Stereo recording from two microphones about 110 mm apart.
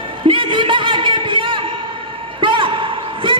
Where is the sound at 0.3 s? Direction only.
50° right (ahead or behind).